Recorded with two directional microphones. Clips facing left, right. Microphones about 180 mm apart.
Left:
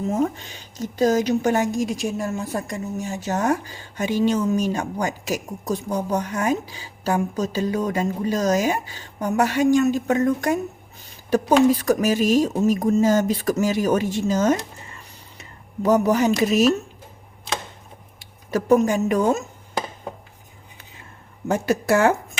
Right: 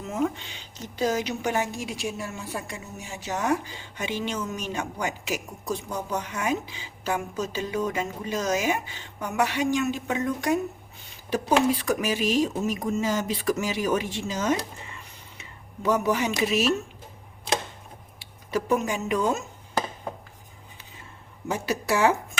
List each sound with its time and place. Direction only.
0.0 s speech: 40° left (ahead or behind)
14.9 s whispering: 40° left (ahead or behind)
18.2 s speech: 40° left (ahead or behind)
21.4 s speech: 50° left (ahead or behind)